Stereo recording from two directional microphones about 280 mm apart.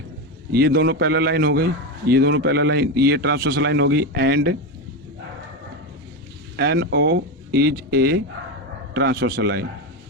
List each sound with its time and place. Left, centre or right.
0.5 s a man's voice: right
6.6 s a man's voice: right